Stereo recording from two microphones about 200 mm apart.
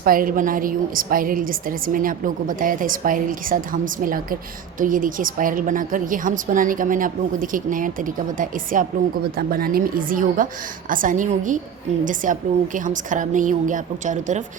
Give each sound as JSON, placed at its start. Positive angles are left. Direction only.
{"t": 0.0, "sound": "a woman's voice", "side_deg": -45}